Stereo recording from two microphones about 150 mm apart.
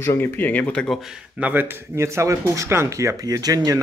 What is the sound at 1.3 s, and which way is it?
A man's voice, 10° right (ahead or behind).